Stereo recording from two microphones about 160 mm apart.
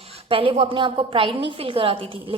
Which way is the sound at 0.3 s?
35° right (ahead or behind).